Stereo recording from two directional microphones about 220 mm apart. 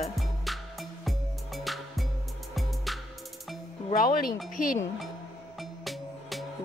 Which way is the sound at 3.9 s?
40° left (ahead or behind).